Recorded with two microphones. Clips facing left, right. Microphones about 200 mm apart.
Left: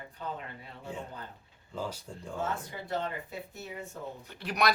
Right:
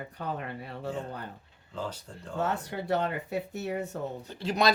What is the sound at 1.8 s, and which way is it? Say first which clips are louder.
Speech: even; 10° left (ahead or behind).